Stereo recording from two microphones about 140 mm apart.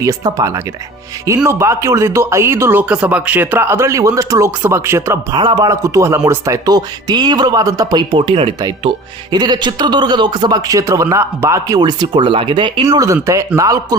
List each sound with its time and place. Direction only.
0.0 s speech: 25° right (ahead or behind)
5.4 s a man's voice: 30° right (ahead or behind)
13.6 s speech: 25° right (ahead or behind)